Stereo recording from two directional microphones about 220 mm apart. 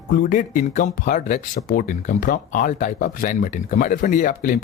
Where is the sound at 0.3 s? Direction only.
35° left (ahead or behind).